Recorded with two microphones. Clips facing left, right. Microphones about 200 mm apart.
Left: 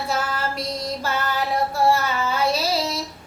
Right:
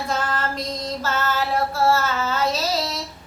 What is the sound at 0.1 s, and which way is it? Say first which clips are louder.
Female singing: right 1 dB; 10° left (ahead or behind).